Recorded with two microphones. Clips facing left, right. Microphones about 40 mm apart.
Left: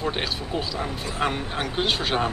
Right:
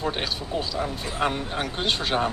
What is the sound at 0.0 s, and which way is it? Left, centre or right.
Speech, centre.